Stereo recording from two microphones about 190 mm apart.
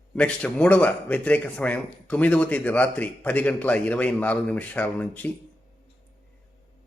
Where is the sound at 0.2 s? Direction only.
5° left (ahead or behind).